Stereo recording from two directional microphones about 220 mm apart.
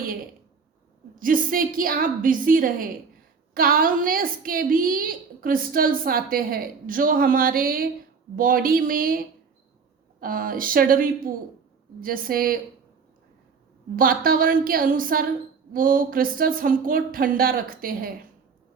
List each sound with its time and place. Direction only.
1.1 s a woman's voice: 40° right (ahead or behind)
13.9 s a woman's voice: 40° right (ahead or behind)